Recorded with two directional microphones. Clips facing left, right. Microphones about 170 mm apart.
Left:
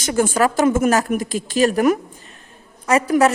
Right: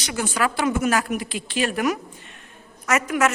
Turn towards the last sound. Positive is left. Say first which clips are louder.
# left 6 dB
turn(degrees=35)  # may be behind; listen again after turning